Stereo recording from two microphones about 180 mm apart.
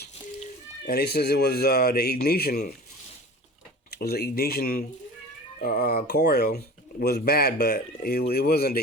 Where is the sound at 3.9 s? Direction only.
60° left (ahead or behind).